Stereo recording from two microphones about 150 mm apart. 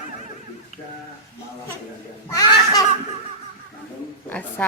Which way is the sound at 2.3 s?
25° left (ahead or behind).